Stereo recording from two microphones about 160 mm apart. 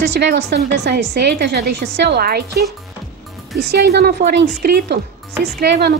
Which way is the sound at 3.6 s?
90° right.